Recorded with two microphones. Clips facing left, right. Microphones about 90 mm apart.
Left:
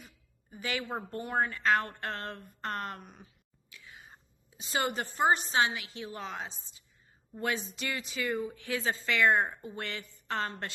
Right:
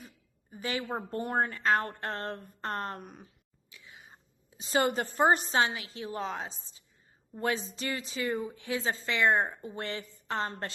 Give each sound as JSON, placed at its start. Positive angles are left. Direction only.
{"t": 0.5, "sound": "a woman's voice", "side_deg": -30}
{"t": 1.1, "sound": "a woman's voice", "side_deg": -45}
{"t": 3.0, "sound": "a woman's voice", "side_deg": -50}
{"t": 3.7, "sound": "whispering", "side_deg": -25}
{"t": 4.5, "sound": "a woman's voice", "side_deg": -35}